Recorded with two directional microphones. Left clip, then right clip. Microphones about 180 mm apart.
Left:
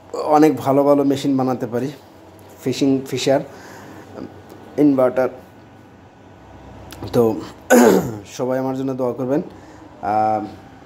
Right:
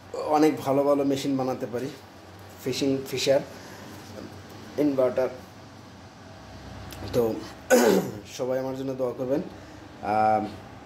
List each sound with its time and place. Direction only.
0.1 s speech: 60° left (ahead or behind)
6.9 s speech: 60° left (ahead or behind)
10.0 s speech: 15° left (ahead or behind)